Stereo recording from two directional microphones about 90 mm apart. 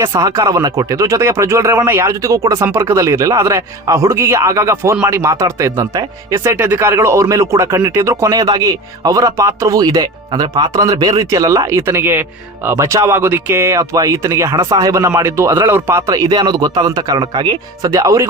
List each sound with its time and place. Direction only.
0.1 s speech: 45° right (ahead or behind); by 2.1 s 25° right (ahead or behind)
2.2 s speech: 40° right (ahead or behind)
11.8 s speech: 25° right (ahead or behind)
12.6 s speech: 35° right (ahead or behind)